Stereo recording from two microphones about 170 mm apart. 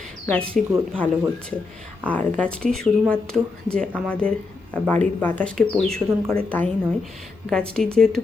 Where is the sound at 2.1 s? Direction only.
10° left (ahead or behind).